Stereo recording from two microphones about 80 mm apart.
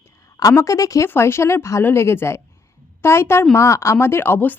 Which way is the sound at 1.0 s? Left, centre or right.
Left.